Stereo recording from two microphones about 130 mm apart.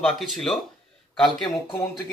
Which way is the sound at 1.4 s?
45° left (ahead or behind).